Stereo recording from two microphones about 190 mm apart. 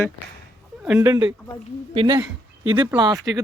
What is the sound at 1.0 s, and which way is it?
Speech, 20° right (ahead or behind).